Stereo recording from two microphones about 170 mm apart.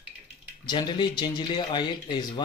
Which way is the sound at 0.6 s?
25° left (ahead or behind).